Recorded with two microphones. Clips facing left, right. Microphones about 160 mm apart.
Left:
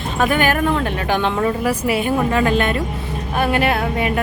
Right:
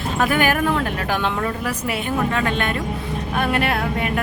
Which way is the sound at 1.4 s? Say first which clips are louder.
Left 6 dB; 10° left (ahead or behind).